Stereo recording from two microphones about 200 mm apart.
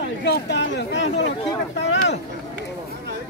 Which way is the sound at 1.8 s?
60° left (ahead or behind).